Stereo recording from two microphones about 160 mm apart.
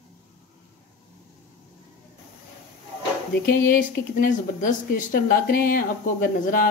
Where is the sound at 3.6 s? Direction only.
55° left (ahead or behind).